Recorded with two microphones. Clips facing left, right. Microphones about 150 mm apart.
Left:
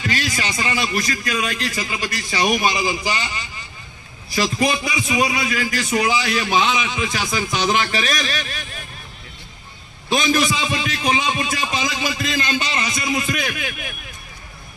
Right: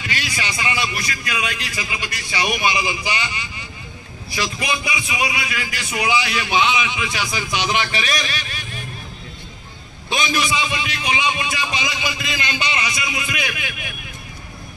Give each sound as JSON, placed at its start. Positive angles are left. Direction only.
{"t": 0.0, "sound": "a man's voice", "side_deg": 45}
{"t": 10.1, "sound": "a man's voice", "side_deg": 45}